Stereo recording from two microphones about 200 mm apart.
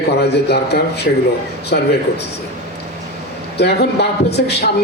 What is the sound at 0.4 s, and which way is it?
A man's voice, 55° left (ahead or behind).